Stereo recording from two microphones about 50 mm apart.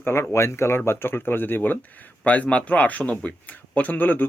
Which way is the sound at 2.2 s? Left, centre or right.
Left.